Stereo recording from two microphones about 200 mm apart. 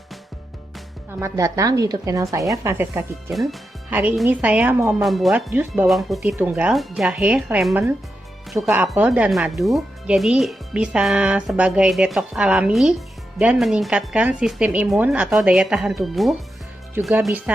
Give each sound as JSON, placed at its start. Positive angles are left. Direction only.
{"t": 1.2, "sound": "a woman's voice", "side_deg": -15}